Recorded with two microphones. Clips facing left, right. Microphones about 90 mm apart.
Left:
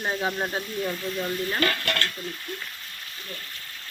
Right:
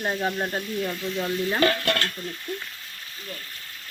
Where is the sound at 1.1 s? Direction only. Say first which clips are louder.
Right 5 dB; 20° right (ahead or behind).